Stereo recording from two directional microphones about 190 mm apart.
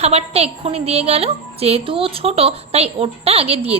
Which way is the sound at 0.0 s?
35° right (ahead or behind).